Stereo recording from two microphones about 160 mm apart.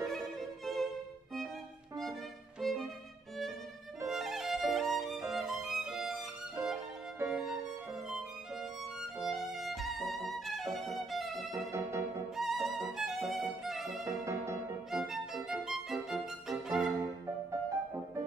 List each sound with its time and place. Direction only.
0.0 s violin: centre (ahead or behind)
2.6 s music: centre (ahead or behind)
4.1 s violin: centre (ahead or behind)
7.2 s music: 5° right (ahead or behind)
8.1 s violin: centre (ahead or behind)
11.5 s music: 20° right (ahead or behind)
12.4 s music: centre (ahead or behind)
13.4 s violin: centre (ahead or behind)
14.0 s music: 20° right (ahead or behind)
14.9 s music: centre (ahead or behind)
17.0 s music: 20° right (ahead or behind)